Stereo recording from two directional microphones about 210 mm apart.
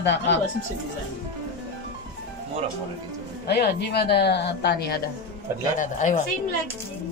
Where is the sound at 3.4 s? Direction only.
50° left (ahead or behind).